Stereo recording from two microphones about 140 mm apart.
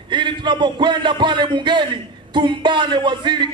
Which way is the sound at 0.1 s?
35° right (ahead or behind).